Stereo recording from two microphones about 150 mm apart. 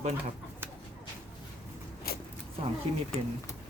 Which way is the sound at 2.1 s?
85° left.